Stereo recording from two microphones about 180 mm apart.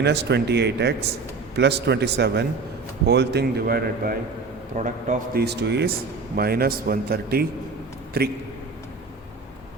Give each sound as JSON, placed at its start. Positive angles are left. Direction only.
{"t": 0.0, "sound": "a man's voice", "side_deg": -70}
{"t": 4.8, "sound": "a man's voice", "side_deg": -45}